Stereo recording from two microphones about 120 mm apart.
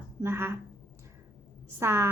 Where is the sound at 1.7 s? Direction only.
20° right (ahead or behind).